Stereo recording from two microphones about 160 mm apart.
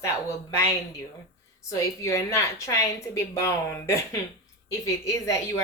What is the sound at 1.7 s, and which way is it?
A woman's voice, 20° left (ahead or behind).